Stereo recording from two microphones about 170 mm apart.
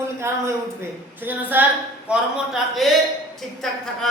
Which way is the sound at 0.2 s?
15° right (ahead or behind).